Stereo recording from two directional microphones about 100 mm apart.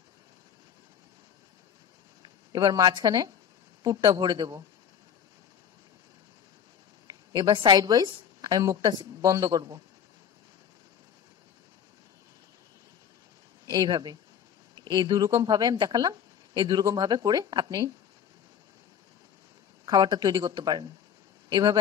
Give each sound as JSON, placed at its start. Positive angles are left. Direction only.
{"t": 2.5, "sound": "speech", "side_deg": -40}
{"t": 7.1, "sound": "a woman's voice", "side_deg": -45}
{"t": 13.7, "sound": "speech", "side_deg": -40}
{"t": 19.8, "sound": "a man's voice", "side_deg": -45}